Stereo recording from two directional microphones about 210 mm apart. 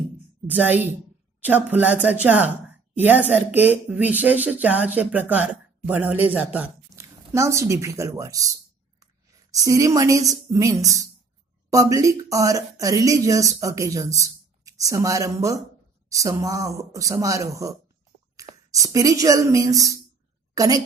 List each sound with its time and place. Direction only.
0.5 s a woman's voice: 10° right (ahead or behind)